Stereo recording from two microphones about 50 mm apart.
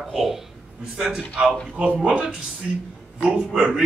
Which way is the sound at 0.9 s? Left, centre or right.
Centre.